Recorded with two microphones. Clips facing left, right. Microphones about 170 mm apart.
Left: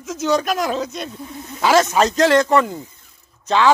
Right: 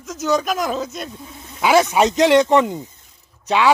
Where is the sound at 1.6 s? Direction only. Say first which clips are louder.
Even; 10° right (ahead or behind).